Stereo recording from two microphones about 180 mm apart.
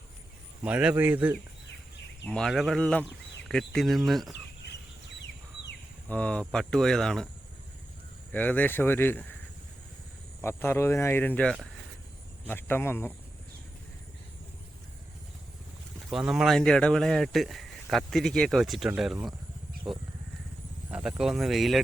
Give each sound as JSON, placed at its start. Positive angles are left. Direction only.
{"t": 0.6, "sound": "speech", "side_deg": -5}
{"t": 2.2, "sound": "speech", "side_deg": 5}
{"t": 4.7, "sound": "bird", "side_deg": 75}
{"t": 6.1, "sound": "speech", "side_deg": 5}
{"t": 8.3, "sound": "speech", "side_deg": 10}
{"t": 10.4, "sound": "speech", "side_deg": 15}
{"t": 16.0, "sound": "speech", "side_deg": 0}
{"t": 20.9, "sound": "speech", "side_deg": -5}